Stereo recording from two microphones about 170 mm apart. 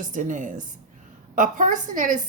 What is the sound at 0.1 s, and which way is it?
A woman's voice, 50° right (ahead or behind).